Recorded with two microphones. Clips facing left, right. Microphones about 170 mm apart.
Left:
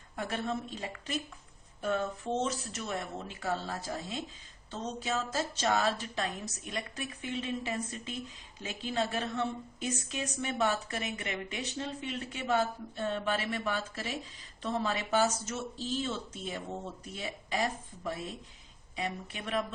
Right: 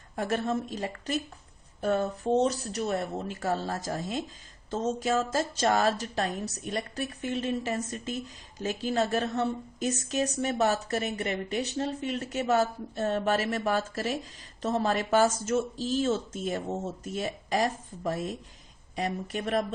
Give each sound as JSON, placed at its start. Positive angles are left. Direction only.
{"t": 0.2, "sound": "speech", "side_deg": -45}